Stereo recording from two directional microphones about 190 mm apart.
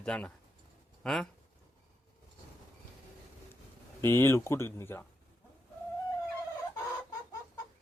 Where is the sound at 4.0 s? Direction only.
10° left (ahead or behind).